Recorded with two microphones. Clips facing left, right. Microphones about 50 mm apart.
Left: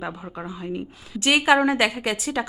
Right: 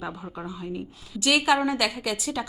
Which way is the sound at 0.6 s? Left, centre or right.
Left.